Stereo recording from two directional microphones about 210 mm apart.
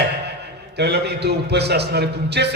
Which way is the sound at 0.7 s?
50° right (ahead or behind).